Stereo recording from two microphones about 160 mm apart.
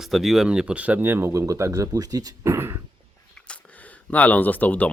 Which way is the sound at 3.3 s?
5° left (ahead or behind).